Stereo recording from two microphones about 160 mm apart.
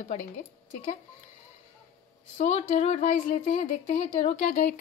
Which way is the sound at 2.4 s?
45° left (ahead or behind).